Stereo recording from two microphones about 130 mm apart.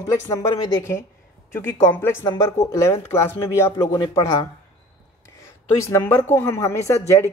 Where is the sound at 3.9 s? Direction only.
30° left (ahead or behind).